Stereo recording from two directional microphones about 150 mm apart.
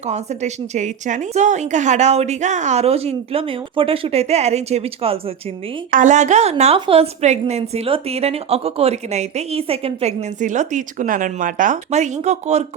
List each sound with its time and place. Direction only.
0.1 s a woman's voice: 50° right (ahead or behind)
5.9 s a woman's voice: 55° right (ahead or behind)